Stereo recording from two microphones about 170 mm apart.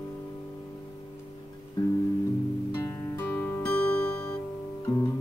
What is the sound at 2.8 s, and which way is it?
Music, 15° left (ahead or behind).